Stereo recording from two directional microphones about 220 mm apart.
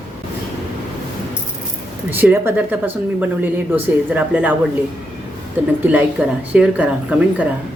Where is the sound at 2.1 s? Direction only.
10° right (ahead or behind).